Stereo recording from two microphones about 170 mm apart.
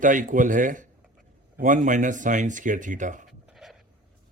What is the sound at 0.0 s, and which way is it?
Speech, 50° right (ahead or behind).